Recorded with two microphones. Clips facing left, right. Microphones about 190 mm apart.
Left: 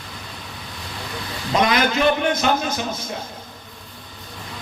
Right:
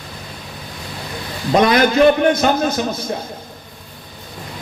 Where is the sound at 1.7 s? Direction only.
45° right (ahead or behind).